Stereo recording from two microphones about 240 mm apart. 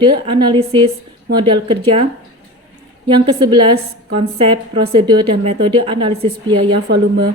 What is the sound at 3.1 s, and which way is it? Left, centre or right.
A woman's voice, centre.